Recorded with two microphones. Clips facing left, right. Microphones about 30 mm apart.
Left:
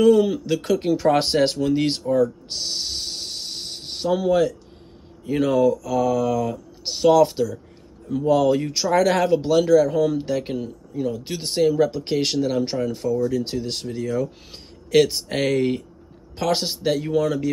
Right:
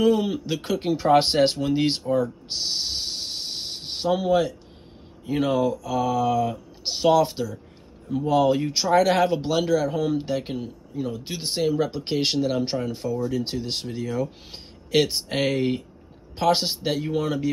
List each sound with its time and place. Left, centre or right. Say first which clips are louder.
0.0 s speech: left 5 dB; centre
2.5 s a sound: even; centre
4.3 s speech: left 2 dB; centre
17.1 s speech: left 4 dB; centre